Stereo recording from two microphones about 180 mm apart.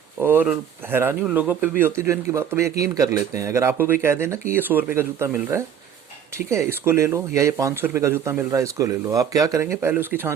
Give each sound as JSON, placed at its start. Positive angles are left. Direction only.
{"t": 0.2, "sound": "speech", "side_deg": -10}